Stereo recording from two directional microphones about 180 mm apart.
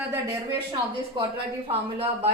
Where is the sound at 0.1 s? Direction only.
20° right (ahead or behind).